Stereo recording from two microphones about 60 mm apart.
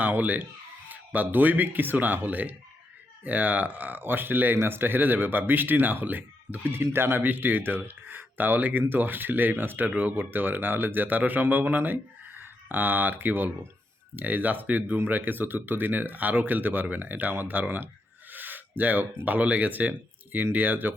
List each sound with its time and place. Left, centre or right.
0.0 s speech: right